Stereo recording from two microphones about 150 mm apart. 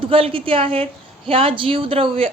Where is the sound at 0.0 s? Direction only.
35° right (ahead or behind).